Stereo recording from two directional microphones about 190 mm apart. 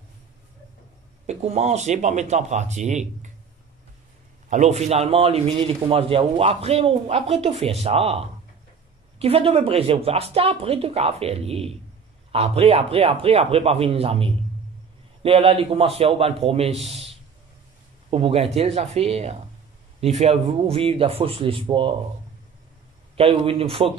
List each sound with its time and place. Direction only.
1.2 s a man's voice: 35° right (ahead or behind)
4.5 s a man's voice: 35° right (ahead or behind)
9.2 s a man's voice: 30° right (ahead or behind)
18.1 s a man's voice: 30° right (ahead or behind)
23.1 s speech: 30° right (ahead or behind)